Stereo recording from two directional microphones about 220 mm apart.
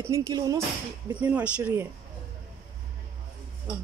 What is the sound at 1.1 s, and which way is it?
Speech, 5° right (ahead or behind).